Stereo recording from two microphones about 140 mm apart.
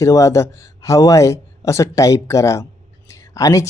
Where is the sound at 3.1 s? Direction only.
20° left (ahead or behind).